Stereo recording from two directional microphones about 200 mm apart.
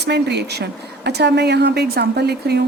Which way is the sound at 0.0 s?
55° right (ahead or behind).